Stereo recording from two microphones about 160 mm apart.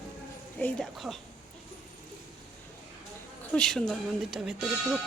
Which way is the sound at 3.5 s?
5° left (ahead or behind).